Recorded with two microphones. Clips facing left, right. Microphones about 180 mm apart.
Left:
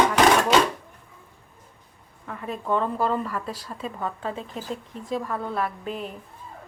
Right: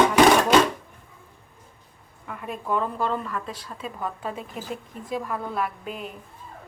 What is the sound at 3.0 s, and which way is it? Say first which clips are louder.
Speech: left 2 dB; 5° left (ahead or behind).